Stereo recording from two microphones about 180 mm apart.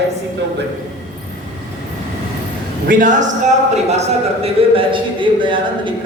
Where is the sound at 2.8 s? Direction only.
45° right (ahead or behind); by 5.9 s 25° right (ahead or behind).